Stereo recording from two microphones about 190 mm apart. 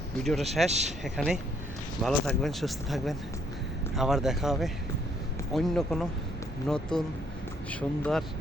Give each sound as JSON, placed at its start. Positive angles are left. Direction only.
{"t": 0.2, "sound": "speech", "side_deg": 0}
{"t": 0.7, "sound": "speech", "side_deg": -35}
{"t": 1.0, "sound": "speech", "side_deg": 0}